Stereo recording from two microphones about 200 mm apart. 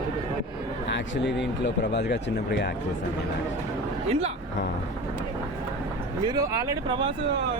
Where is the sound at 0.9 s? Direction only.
60° left (ahead or behind).